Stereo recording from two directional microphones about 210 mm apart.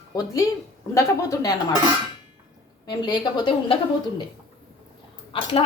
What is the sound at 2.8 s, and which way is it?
Speech, 20° left (ahead or behind).